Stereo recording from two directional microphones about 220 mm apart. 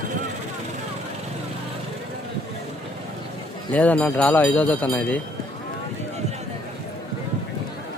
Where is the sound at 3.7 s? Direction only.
5° left (ahead or behind).